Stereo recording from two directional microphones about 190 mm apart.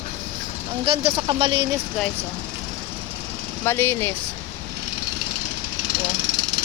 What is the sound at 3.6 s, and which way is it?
Speech, 15° left (ahead or behind).